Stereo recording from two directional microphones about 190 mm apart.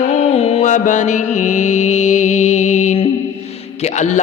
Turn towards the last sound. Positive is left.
turn(degrees=40)  # may be behind; listen again after turning